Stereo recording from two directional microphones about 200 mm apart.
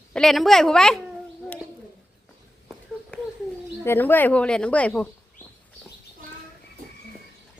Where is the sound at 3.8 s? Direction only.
10° left (ahead or behind).